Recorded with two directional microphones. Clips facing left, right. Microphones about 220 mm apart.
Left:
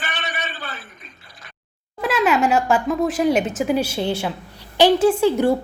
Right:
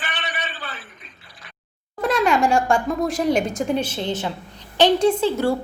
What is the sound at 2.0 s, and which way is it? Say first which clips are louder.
A woman's voice: even; 5° left (ahead or behind).